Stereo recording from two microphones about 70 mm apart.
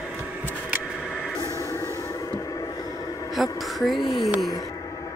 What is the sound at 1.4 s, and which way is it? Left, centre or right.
Music, left.